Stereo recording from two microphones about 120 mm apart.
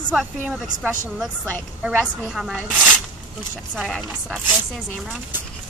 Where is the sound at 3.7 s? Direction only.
Centre (ahead or behind).